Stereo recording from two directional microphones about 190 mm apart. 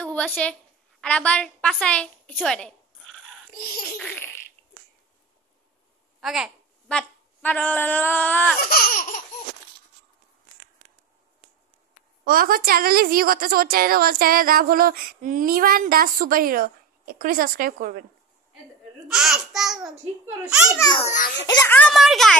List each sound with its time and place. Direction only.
0.0 s a woman's voice: 5° left (ahead or behind)
3.5 s laughter: 50° left (ahead or behind)
4.0 s a sound: 10° left (ahead or behind)
6.2 s a woman's voice: centre (ahead or behind)
8.5 s laughter: 50° left (ahead or behind)
12.3 s a woman's voice: 50° right (ahead or behind)
19.0 s a child's voice: centre (ahead or behind)
20.7 s a child's voice: 20° left (ahead or behind); by 22.4 s centre (ahead or behind)